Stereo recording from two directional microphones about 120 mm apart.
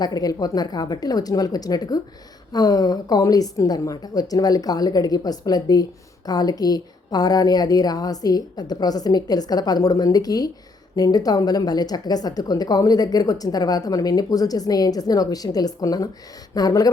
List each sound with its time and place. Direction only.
0.0 s a woman's voice: 30° left (ahead or behind)